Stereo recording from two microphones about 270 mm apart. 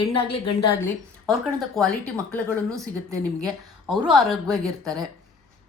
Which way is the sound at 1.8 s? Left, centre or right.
Centre.